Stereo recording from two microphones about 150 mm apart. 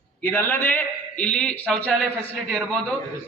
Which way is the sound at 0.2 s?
15° left (ahead or behind).